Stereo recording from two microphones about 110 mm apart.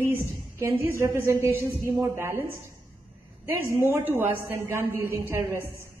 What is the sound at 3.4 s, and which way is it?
A woman's voice, 20° right (ahead or behind).